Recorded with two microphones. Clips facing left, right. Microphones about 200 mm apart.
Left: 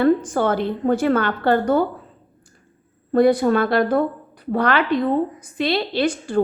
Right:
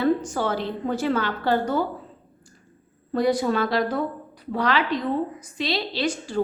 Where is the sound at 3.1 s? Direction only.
55° left (ahead or behind).